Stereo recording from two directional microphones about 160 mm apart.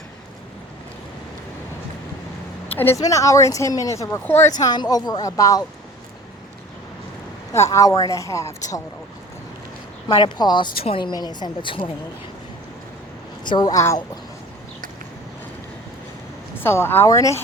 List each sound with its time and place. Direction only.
2.7 s speech: 15° left (ahead or behind)
7.7 s speech: 20° left (ahead or behind)
10.1 s a woman's voice: 30° left (ahead or behind)
13.4 s speech: 25° left (ahead or behind)
16.6 s speech: 15° left (ahead or behind)